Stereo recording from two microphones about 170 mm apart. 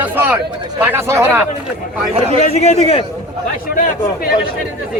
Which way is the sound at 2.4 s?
40° left (ahead or behind).